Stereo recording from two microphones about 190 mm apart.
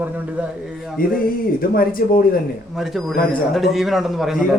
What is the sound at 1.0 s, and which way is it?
Speech, 50° left (ahead or behind).